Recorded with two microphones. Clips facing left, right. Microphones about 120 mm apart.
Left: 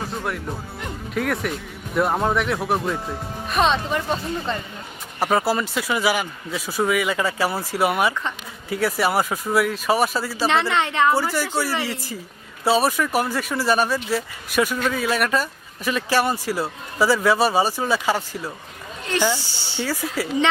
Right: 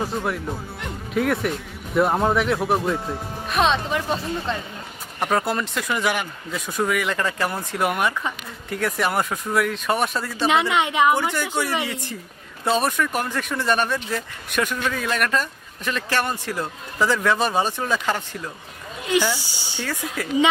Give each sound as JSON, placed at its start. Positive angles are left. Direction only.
{"t": 0.1, "sound": "speech", "side_deg": 0}
{"t": 10.5, "sound": "a woman's voice", "side_deg": -15}
{"t": 11.2, "sound": "speech", "side_deg": 5}
{"t": 19.4, "sound": "speech", "side_deg": -15}
{"t": 19.7, "sound": "speech", "side_deg": 10}